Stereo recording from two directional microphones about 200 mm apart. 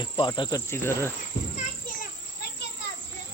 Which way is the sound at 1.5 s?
45° left (ahead or behind).